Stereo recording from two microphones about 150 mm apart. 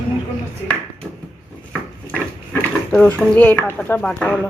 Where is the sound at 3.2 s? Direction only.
10° left (ahead or behind).